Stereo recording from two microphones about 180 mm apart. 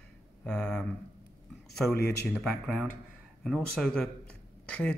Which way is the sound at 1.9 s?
60° left (ahead or behind).